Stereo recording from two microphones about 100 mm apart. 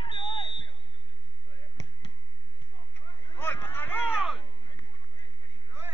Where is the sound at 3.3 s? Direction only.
20° left (ahead or behind).